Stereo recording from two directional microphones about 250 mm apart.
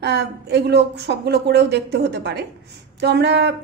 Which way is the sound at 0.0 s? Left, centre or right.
Right.